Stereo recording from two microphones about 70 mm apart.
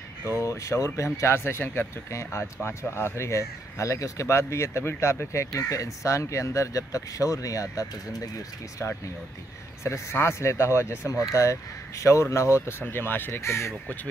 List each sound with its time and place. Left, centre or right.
0.4 s speech: left
8.8 s speech: left
10.1 s speech: left